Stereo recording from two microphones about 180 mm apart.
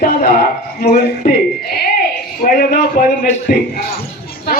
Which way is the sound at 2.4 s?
55° left (ahead or behind).